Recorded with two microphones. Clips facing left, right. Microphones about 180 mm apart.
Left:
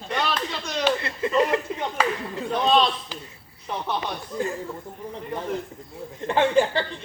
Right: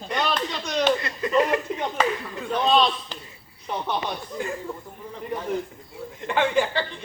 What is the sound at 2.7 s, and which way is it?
Speech, centre (ahead or behind).